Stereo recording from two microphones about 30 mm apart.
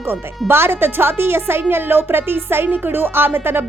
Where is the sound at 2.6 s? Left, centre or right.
Right.